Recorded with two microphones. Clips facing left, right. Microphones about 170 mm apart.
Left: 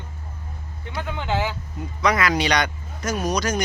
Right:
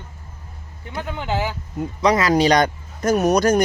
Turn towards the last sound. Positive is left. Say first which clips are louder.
# right 8 dB
turn(degrees=-55)  # may be behind; listen again after turning